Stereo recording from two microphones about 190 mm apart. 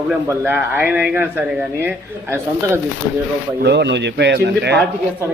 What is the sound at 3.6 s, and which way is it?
Speech, 65° right (ahead or behind).